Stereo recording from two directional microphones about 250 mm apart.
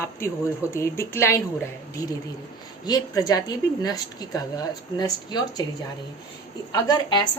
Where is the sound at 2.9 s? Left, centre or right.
Centre.